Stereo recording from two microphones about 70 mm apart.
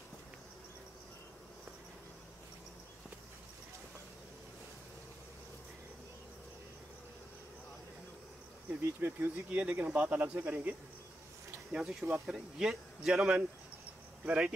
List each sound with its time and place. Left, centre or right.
9.0 s speech: right
9.6 s speech: right
11.7 s speech: centre